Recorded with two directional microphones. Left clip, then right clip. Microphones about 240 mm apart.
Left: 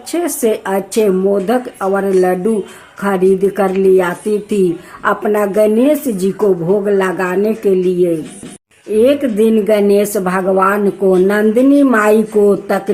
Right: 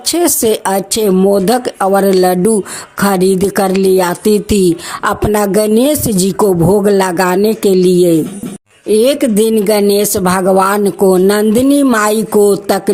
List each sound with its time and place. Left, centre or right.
0.1 s speech: right